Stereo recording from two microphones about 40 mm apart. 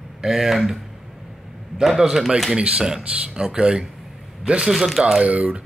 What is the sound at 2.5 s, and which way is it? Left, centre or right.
Speech, right.